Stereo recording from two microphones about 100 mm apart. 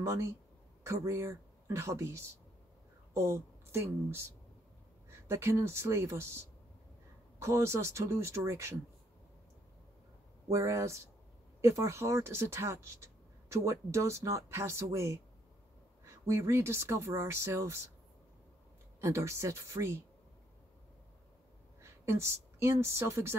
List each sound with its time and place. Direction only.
0.0 s speech: 30° right (ahead or behind)
10.5 s speech: 30° right (ahead or behind)
16.3 s speech: 30° right (ahead or behind)
18.9 s speech: 30° right (ahead or behind)
21.8 s a woman's voice: 30° right (ahead or behind)